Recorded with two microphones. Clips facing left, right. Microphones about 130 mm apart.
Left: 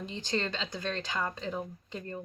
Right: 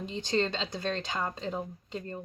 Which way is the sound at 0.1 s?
25° right (ahead or behind).